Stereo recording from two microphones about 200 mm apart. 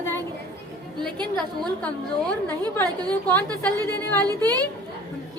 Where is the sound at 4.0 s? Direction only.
10° left (ahead or behind).